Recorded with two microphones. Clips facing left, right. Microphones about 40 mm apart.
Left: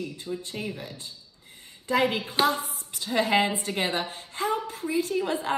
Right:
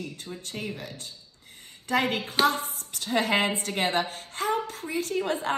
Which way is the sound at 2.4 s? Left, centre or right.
Right.